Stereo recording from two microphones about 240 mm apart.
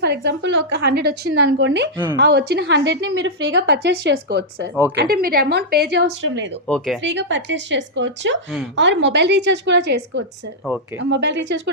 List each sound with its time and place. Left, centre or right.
0.0 s a woman's voice: right
6.7 s speech: centre
7.0 s a woman's voice: right